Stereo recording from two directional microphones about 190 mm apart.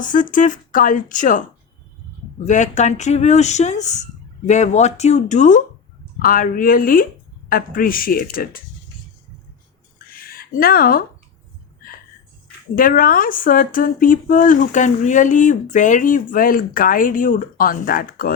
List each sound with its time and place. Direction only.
0.0 s speech: 45° left (ahead or behind)
10.1 s a sound: 50° left (ahead or behind)
12.7 s speech: 45° left (ahead or behind)